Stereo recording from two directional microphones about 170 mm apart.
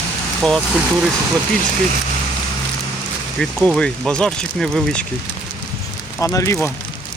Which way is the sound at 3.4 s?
5° left (ahead or behind).